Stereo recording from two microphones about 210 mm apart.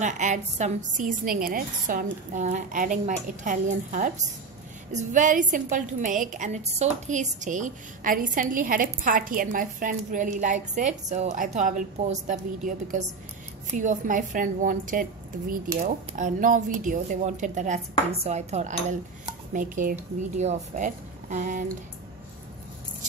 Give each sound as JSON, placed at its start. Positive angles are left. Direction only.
{"t": 0.0, "sound": "a woman's voice", "side_deg": -35}